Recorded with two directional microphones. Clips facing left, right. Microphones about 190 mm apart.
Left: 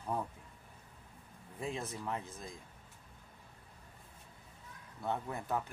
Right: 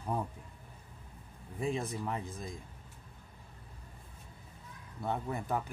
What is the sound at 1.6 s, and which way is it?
Speech, 15° right (ahead or behind).